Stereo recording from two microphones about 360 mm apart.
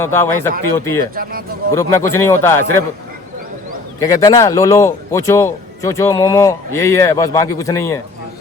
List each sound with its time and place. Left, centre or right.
0.0 s a man's voice: centre
1.1 s speech: right
1.7 s a man's voice: centre
4.0 s a man's voice: centre